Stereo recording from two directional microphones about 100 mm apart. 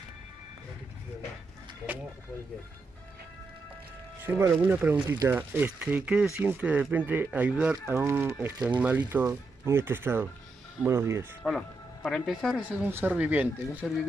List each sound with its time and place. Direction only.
4.2 s speech: 25° right (ahead or behind)
5.0 s speech: 35° right (ahead or behind)
5.3 s speech: 20° right (ahead or behind)
7.9 s speech: 25° right (ahead or behind)
11.4 s speech: 5° left (ahead or behind)
12.5 s speech: 15° right (ahead or behind)